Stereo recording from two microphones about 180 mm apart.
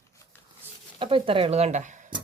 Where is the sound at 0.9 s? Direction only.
30° right (ahead or behind).